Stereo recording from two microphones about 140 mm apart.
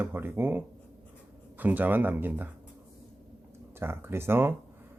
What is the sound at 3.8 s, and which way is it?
Speech, 15° right (ahead or behind).